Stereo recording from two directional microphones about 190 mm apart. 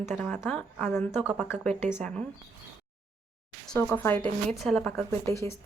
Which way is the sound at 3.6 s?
5° left (ahead or behind).